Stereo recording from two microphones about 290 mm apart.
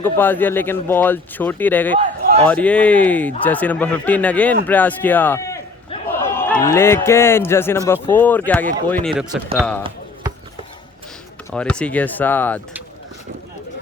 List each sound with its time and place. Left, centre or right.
0.0 s speech: centre
2.0 s a sound: right
2.4 s a man's voice: centre
11.5 s speech: centre